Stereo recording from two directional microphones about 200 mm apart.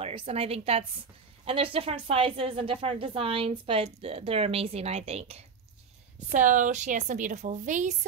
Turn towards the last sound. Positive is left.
turn(degrees=-35)  # may be behind; listen again after turning